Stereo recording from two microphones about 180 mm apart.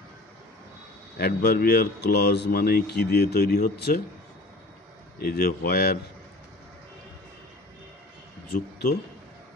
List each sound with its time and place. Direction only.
1.1 s speech: 60° left (ahead or behind)
5.2 s speech: 55° left (ahead or behind)
8.5 s speech: 55° left (ahead or behind)